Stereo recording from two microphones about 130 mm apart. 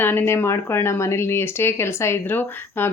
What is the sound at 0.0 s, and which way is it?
Speech, 15° left (ahead or behind).